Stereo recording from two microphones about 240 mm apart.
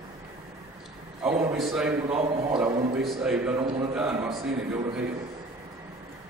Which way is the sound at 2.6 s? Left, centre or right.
Centre.